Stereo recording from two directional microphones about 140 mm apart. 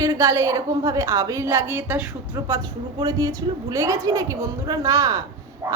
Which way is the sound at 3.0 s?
25° right (ahead or behind).